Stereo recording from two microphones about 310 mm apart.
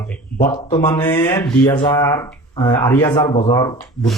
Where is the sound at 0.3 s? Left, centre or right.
Left.